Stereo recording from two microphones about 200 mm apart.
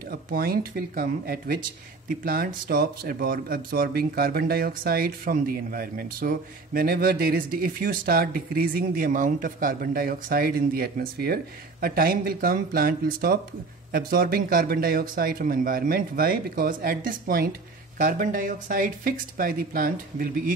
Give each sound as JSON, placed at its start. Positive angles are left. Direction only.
{"t": 0.1, "sound": "speech", "side_deg": -50}